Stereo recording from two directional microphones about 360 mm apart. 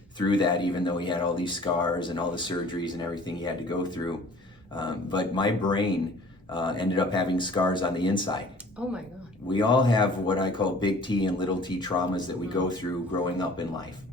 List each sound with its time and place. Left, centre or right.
0.2 s speech: centre
8.8 s speech: centre
9.5 s speech: centre